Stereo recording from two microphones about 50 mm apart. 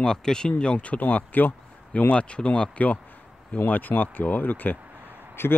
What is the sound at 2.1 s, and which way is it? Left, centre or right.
Speech, left.